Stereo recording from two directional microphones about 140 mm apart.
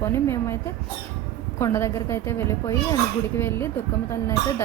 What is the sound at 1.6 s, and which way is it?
A woman's voice, 20° left (ahead or behind).